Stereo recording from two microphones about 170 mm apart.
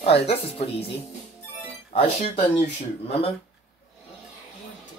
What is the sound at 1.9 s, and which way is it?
Speech, 35° left (ahead or behind).